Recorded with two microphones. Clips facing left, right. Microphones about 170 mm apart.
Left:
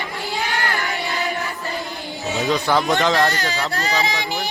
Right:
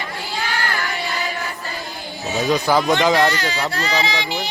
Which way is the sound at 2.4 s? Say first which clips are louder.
Right 2 dB; centre (ahead or behind).